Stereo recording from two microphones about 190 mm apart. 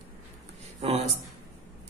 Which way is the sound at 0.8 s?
30° right (ahead or behind).